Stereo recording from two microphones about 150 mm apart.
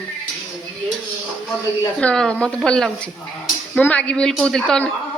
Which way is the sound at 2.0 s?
5° left (ahead or behind).